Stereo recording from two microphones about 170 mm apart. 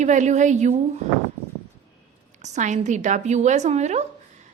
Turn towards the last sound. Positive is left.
turn(degrees=-40)  # may be behind; listen again after turning